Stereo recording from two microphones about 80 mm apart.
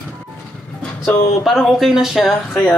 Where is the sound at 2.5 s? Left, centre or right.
Centre.